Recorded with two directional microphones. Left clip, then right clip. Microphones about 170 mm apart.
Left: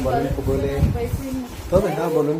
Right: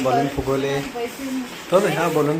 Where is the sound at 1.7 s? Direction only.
5° right (ahead or behind).